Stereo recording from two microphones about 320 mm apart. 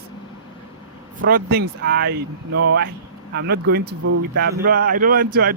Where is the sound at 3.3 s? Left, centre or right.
Right.